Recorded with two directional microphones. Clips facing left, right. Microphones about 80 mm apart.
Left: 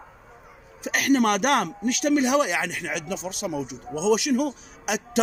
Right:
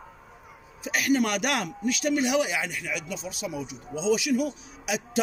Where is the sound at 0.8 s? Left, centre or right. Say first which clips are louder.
Left 3 dB; left.